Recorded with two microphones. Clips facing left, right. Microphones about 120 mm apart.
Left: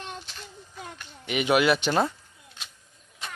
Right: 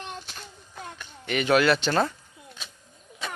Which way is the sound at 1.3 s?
15° left (ahead or behind).